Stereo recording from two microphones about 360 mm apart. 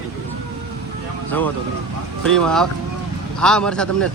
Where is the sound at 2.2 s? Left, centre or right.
Centre.